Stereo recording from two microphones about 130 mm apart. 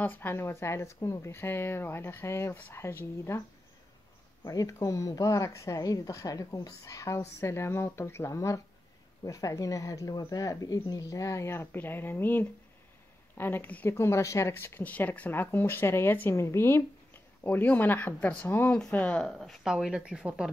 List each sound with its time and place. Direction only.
0.0 s speech: 15° left (ahead or behind)
4.5 s a woman's voice: 25° left (ahead or behind); by 20.5 s 5° right (ahead or behind)